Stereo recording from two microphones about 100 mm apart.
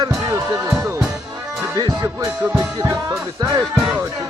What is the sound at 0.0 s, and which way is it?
Music, 40° right (ahead or behind).